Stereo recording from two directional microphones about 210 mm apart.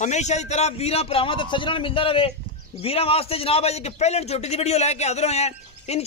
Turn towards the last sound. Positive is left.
turn(degrees=30)  # may be behind; listen again after turning